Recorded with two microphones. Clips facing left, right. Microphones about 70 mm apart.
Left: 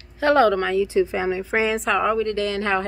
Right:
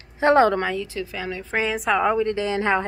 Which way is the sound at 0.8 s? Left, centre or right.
Left.